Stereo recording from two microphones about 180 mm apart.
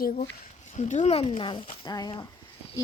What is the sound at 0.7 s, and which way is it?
Speech, 40° left (ahead or behind).